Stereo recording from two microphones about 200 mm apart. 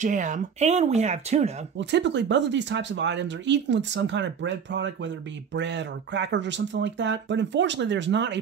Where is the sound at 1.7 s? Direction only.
60° right (ahead or behind).